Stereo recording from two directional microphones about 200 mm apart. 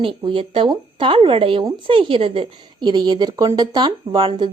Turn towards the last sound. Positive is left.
turn(degrees=-25)  # may be behind; listen again after turning